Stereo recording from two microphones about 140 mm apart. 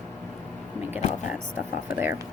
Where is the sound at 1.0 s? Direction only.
65° left (ahead or behind).